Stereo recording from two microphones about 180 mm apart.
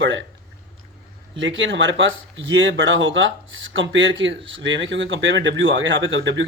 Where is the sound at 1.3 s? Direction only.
90° right.